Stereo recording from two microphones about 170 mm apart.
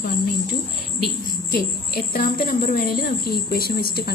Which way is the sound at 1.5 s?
65° left (ahead or behind).